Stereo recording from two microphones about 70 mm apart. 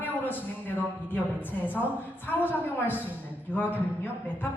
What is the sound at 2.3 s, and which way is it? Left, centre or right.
A man's voice, left.